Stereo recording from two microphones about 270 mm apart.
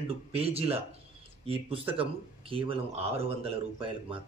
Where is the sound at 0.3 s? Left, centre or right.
Right.